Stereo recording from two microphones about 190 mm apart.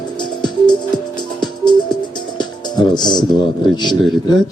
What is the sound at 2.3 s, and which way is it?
Music, 20° left (ahead or behind).